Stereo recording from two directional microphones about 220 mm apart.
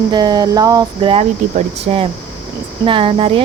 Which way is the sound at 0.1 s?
20° right (ahead or behind).